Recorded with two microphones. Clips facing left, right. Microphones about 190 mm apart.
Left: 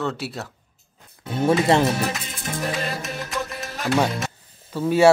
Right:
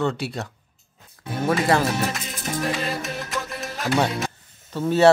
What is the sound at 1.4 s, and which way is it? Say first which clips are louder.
Speech: left 3 dB; 25° left (ahead or behind).